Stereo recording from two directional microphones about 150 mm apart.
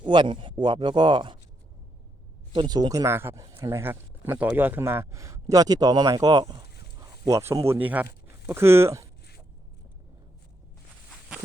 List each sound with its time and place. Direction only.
0.0 s speech: 30° right (ahead or behind)
2.5 s speech: 30° right (ahead or behind)